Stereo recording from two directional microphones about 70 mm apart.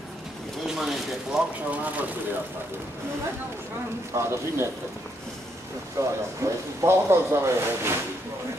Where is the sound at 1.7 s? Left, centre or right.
Right.